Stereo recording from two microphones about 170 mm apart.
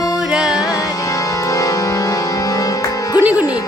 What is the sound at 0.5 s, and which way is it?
Music, 20° left (ahead or behind).